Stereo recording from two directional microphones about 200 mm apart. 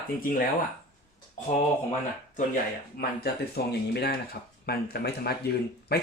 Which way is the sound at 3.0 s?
50° left (ahead or behind).